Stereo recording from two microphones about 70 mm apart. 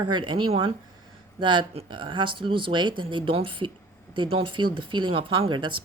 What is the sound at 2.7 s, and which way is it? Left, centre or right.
Speech, right.